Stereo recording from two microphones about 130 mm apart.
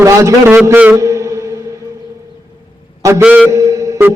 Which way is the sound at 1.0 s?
25° right (ahead or behind).